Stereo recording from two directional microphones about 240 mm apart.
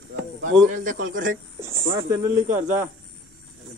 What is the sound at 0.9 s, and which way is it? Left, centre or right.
Speech, right.